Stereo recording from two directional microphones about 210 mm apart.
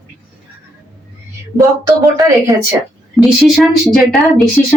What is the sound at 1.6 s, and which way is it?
Speech, 15° right (ahead or behind).